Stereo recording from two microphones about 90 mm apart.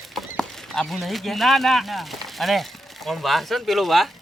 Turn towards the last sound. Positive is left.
turn(degrees=0)  # may be behind; listen again after turning